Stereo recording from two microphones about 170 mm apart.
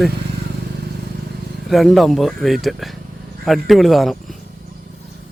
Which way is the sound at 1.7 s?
Centre (ahead or behind).